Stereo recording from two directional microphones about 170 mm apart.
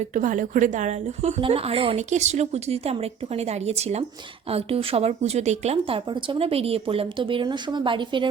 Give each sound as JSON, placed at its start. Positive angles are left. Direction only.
{"t": 0.0, "sound": "a woman's voice", "side_deg": -50}